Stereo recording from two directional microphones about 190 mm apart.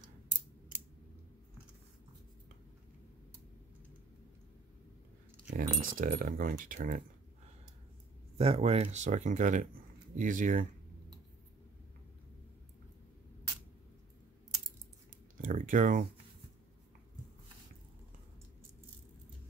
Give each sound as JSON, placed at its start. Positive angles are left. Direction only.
{"t": 5.6, "sound": "speech", "side_deg": -45}
{"t": 8.4, "sound": "speech", "side_deg": -30}
{"t": 15.4, "sound": "speech", "side_deg": -45}